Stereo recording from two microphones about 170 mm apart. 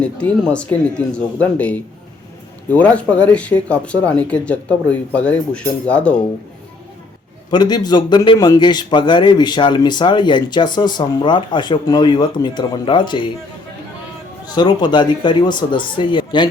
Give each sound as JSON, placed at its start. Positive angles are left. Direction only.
{"t": 0.0, "sound": "speech", "side_deg": 5}
{"t": 7.5, "sound": "a man's voice", "side_deg": 25}
{"t": 14.4, "sound": "a man's voice", "side_deg": 25}